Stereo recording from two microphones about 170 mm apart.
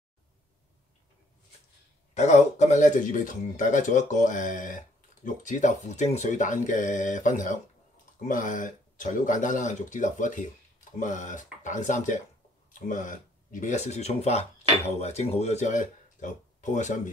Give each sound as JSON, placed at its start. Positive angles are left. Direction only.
{"t": 2.1, "sound": "speech", "side_deg": 45}